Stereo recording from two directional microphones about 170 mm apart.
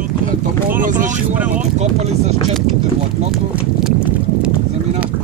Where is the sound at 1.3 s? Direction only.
10° right (ahead or behind).